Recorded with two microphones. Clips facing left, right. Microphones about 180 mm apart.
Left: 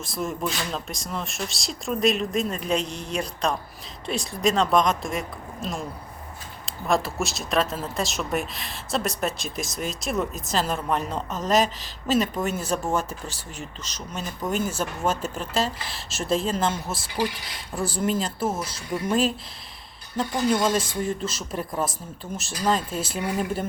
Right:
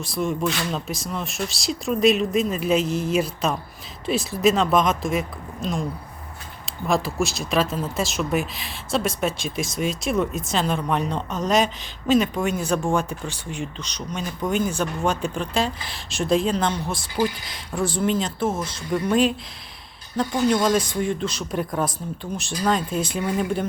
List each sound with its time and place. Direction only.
0.0 s speech: centre (ahead or behind)
6.8 s speech: centre (ahead or behind)